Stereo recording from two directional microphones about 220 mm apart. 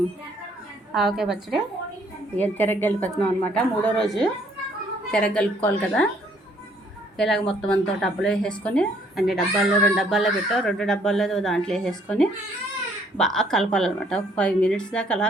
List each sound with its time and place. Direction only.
0.9 s a woman's voice: centre (ahead or behind)
7.2 s speech: centre (ahead or behind)